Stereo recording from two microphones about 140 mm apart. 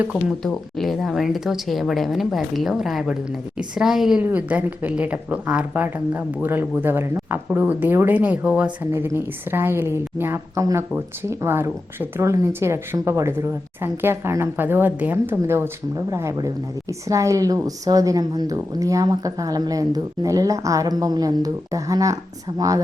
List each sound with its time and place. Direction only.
0.0 s speech: 10° right (ahead or behind)
0.4 s a woman's voice: centre (ahead or behind); by 22.8 s 25° right (ahead or behind)